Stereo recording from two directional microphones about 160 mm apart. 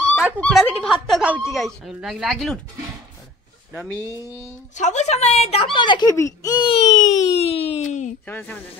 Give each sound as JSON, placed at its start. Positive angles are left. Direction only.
{"t": 0.4, "sound": "snicker", "side_deg": 5}
{"t": 1.5, "sound": "speech", "side_deg": 0}
{"t": 3.7, "sound": "speech", "side_deg": 0}
{"t": 4.7, "sound": "speech", "side_deg": 45}
{"t": 6.8, "sound": "speech", "side_deg": 40}
{"t": 8.3, "sound": "speech", "side_deg": 10}